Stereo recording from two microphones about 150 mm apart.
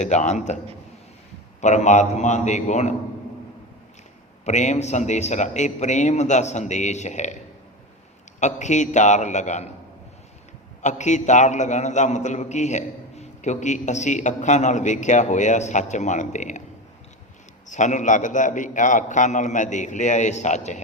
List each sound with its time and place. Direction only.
0.0 s a man's voice: 50° left (ahead or behind)
1.6 s a man's voice: 50° left (ahead or behind)
4.4 s a man's voice: 50° left (ahead or behind)
8.4 s a man's voice: 50° left (ahead or behind)
10.8 s a man's voice: 55° left (ahead or behind)
17.7 s a man's voice: 55° left (ahead or behind)